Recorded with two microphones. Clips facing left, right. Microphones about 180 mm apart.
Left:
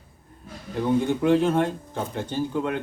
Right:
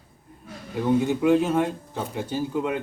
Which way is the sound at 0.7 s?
5° right (ahead or behind).